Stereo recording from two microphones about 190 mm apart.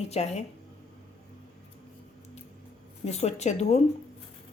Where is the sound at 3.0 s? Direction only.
35° left (ahead or behind).